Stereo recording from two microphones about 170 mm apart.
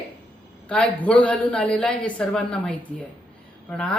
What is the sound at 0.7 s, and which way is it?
Speech, 5° left (ahead or behind).